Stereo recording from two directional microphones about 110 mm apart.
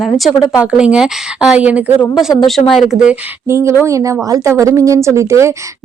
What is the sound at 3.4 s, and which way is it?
Speech, 25° right (ahead or behind).